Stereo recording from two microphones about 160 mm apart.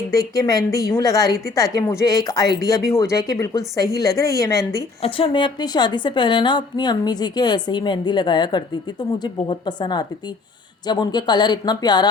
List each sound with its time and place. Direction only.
0.1 s a woman's voice: 20° left (ahead or behind)
5.0 s a woman's voice: 35° left (ahead or behind)